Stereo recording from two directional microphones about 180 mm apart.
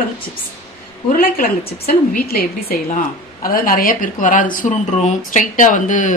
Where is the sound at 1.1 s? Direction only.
50° left (ahead or behind).